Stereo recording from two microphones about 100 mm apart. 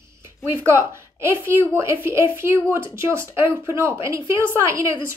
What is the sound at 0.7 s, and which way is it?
A woman's voice, 25° right (ahead or behind).